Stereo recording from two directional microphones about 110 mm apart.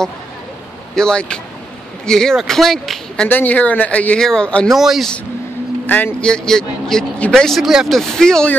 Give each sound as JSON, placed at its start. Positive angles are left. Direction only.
{"t": 0.9, "sound": "speech", "side_deg": 5}
{"t": 3.3, "sound": "speech", "side_deg": 15}
{"t": 5.9, "sound": "speech", "side_deg": 15}